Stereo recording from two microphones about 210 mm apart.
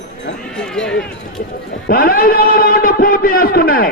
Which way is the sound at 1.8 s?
45° left (ahead or behind).